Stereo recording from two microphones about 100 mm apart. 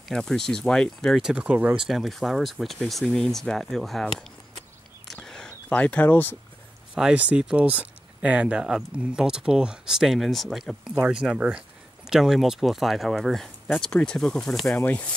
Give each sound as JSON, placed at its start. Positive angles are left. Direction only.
{"t": 0.1, "sound": "speech", "side_deg": 5}
{"t": 1.8, "sound": "speech", "side_deg": 0}
{"t": 5.0, "sound": "a sound", "side_deg": 5}
{"t": 7.0, "sound": "speech", "side_deg": -10}
{"t": 14.8, "sound": "speech", "side_deg": 15}